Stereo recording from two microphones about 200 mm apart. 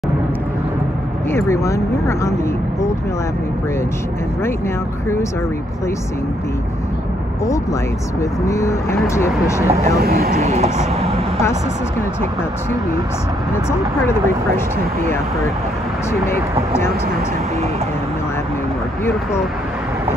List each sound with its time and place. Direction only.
1.3 s speech: 15° left (ahead or behind)
8.2 s speech: 15° left (ahead or behind)
9.9 s speech: 50° right (ahead or behind)
10.4 s speech: 35° right (ahead or behind)